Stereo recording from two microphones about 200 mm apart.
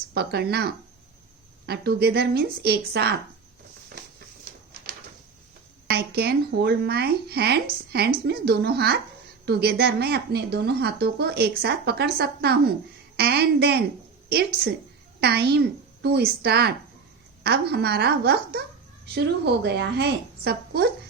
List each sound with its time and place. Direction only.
0.1 s speech: 55° right (ahead or behind)
5.9 s a woman's voice: 55° right (ahead or behind)